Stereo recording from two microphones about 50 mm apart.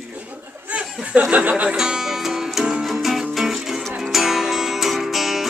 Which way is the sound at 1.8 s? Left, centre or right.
Centre.